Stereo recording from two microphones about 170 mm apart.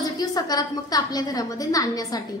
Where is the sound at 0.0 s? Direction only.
20° left (ahead or behind).